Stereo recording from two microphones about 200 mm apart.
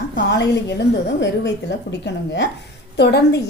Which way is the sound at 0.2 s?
60° left (ahead or behind).